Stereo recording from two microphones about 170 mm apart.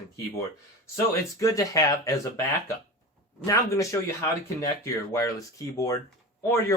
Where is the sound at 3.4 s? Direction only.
20° left (ahead or behind).